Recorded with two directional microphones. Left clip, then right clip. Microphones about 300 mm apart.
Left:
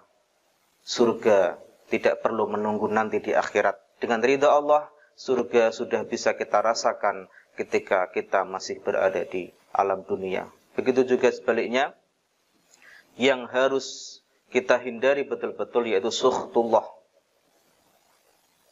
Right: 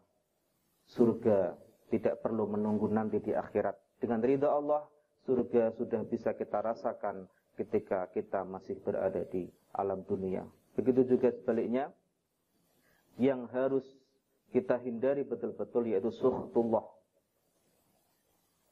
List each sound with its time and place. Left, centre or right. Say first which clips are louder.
0.8 s speech: left 8 dB; centre
13.2 s speech: left 9 dB; centre
16.4 s speech: left 8 dB; left